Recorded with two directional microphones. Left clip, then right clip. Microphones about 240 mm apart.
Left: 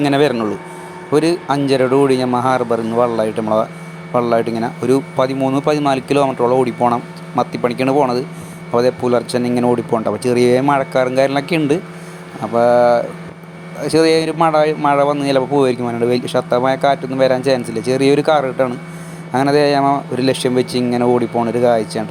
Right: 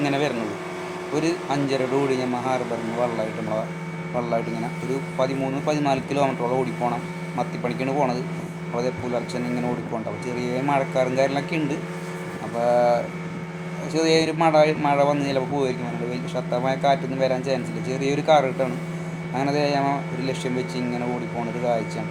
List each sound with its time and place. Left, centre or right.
0.0 s speech: left